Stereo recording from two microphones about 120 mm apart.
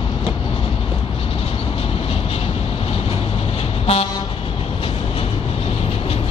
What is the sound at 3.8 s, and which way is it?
Toot, 60° left (ahead or behind).